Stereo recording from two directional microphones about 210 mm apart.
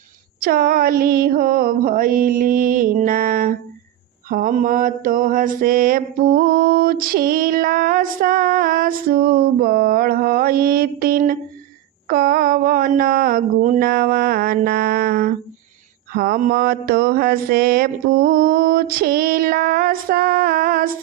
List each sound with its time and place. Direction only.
0.3 s mantra: 45° right (ahead or behind)